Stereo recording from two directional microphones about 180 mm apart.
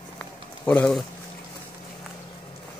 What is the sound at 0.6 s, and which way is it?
Speech, 10° left (ahead or behind).